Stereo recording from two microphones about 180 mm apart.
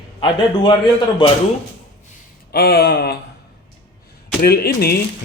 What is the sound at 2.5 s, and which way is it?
Speech, 60° left (ahead or behind).